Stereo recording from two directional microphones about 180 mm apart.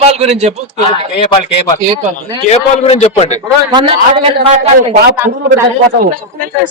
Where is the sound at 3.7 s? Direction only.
30° right (ahead or behind).